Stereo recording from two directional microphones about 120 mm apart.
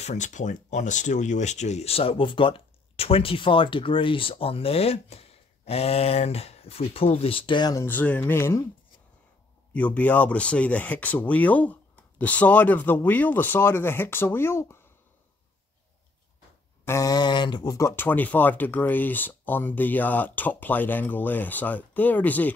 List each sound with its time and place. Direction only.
0.0 s speech: 85° left; by 7.7 s 40° left (ahead or behind)
7.7 s speech: 20° left (ahead or behind)
9.8 s speech: 10° left (ahead or behind)
16.8 s a sound: 25° left (ahead or behind)
17.7 s speech: 20° left (ahead or behind)